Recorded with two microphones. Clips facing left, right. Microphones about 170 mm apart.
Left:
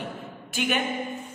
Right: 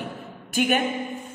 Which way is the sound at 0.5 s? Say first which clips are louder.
Right 5 dB; 45° right (ahead or behind).